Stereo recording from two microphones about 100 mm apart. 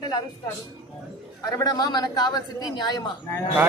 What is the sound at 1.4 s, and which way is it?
A man's voice, 40° left (ahead or behind).